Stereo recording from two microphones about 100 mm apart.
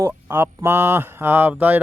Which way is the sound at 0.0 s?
25° right (ahead or behind).